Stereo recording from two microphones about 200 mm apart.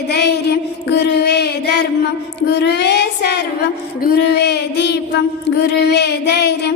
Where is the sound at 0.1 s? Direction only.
55° left (ahead or behind).